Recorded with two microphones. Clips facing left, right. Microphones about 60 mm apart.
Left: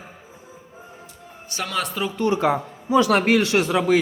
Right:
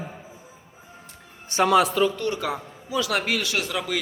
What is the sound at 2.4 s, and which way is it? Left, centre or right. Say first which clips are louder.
A man's voice: left 8 dB; left.